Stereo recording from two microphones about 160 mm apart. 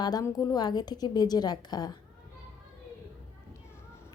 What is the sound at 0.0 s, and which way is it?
A woman's voice, 25° left (ahead or behind).